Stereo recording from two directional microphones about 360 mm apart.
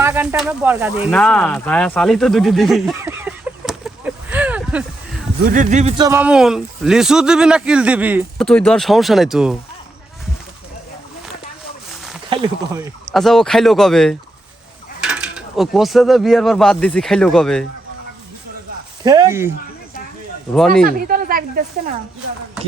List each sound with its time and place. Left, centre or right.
0.0 s speech: centre
5.4 s speech: right; by 9.6 s centre
11.9 s a sound: centre
12.3 s speech: centre
13.1 s speech: centre
19.0 s speech: centre
20.8 s speech: right